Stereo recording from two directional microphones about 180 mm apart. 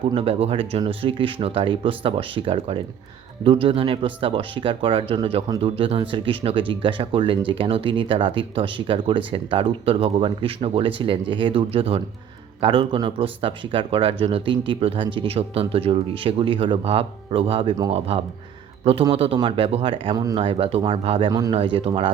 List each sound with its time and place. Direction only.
0.1 s speech: 30° right (ahead or behind)